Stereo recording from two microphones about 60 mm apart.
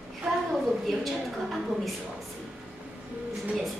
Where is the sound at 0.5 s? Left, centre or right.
Centre.